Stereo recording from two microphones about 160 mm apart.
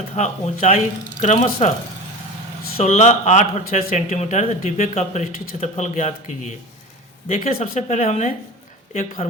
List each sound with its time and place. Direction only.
0.1 s speech: 45° left (ahead or behind)
2.7 s speech: 40° left (ahead or behind)
7.6 s speech: 45° left (ahead or behind)